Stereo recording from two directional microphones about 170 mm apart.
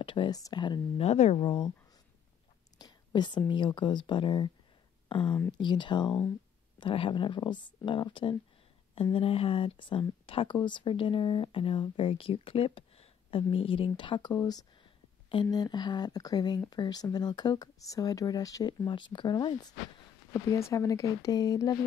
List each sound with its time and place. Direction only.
0.0 s speech: 30° left (ahead or behind)
1.0 s speech: 40° left (ahead or behind)
2.8 s speech: 25° left (ahead or behind)